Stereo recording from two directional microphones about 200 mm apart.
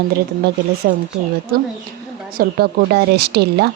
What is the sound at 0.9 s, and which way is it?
Speech, 55° right (ahead or behind).